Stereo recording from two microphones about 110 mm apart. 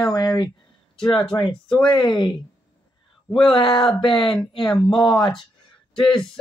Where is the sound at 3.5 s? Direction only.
40° left (ahead or behind).